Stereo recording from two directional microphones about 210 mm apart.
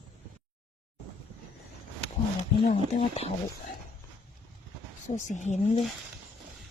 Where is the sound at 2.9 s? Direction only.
30° left (ahead or behind).